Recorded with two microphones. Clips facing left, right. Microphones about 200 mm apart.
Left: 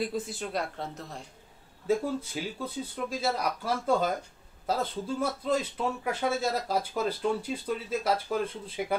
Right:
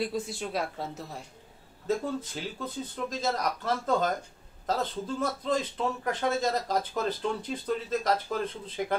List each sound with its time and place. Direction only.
0.0 s speech: centre (ahead or behind)
1.9 s speech: 10° left (ahead or behind)